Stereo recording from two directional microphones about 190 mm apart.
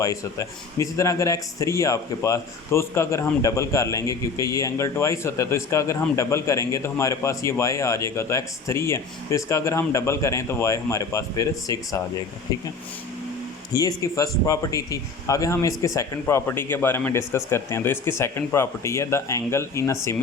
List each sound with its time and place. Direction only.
0.0 s speech: 15° left (ahead or behind)
13.7 s speech: 20° left (ahead or behind)